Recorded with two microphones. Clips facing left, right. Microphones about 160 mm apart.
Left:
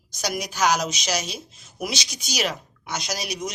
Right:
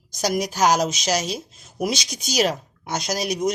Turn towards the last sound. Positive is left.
turn(degrees=-50)  # may be behind; listen again after turning